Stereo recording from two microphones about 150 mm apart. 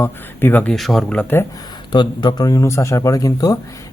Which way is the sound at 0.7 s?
Centre (ahead or behind).